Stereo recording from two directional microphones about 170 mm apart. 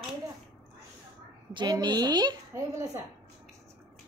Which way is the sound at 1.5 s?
25° right (ahead or behind).